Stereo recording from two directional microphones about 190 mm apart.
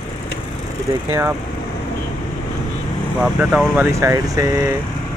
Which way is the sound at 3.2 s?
5° right (ahead or behind).